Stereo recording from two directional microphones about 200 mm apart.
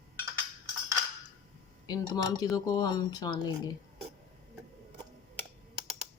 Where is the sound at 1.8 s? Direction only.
20° left (ahead or behind).